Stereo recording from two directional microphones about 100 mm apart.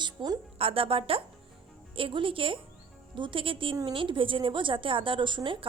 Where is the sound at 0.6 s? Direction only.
65° right (ahead or behind).